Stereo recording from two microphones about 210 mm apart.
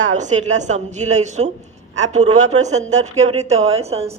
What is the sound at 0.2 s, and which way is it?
A woman's voice, 35° right (ahead or behind).